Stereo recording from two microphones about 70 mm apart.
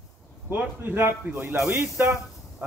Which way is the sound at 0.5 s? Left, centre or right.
Right.